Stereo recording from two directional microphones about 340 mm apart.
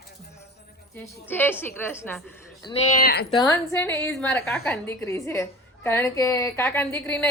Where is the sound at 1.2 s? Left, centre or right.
Centre.